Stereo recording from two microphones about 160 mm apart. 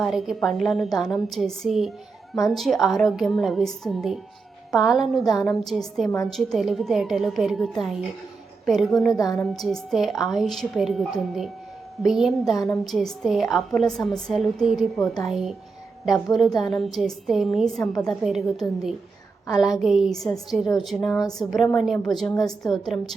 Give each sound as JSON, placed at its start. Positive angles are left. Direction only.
{"t": 0.0, "sound": "a woman's voice", "side_deg": 0}
{"t": 9.1, "sound": "a woman's voice", "side_deg": 20}
{"t": 9.5, "sound": "a woman's voice", "side_deg": 0}